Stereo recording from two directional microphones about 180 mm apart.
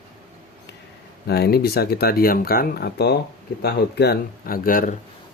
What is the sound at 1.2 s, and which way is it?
Speech, 65° left (ahead or behind).